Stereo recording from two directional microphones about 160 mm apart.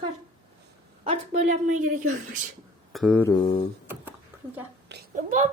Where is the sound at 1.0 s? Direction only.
35° right (ahead or behind).